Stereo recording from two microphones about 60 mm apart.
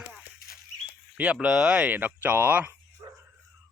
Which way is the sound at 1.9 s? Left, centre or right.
Right.